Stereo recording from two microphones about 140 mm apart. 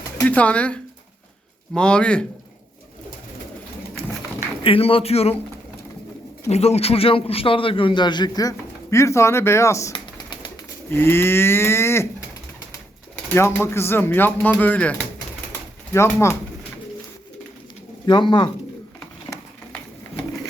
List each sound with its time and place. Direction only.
0.3 s speech: 10° left (ahead or behind)
4.6 s speech: 40° left (ahead or behind)
6.5 s a man's voice: 50° left (ahead or behind); by 9.9 s 20° left (ahead or behind)
9.9 s typing: 35° left (ahead or behind)
10.8 s speech: 15° left (ahead or behind)
13.3 s speech: 15° left (ahead or behind)
18.0 s speech: 30° left (ahead or behind)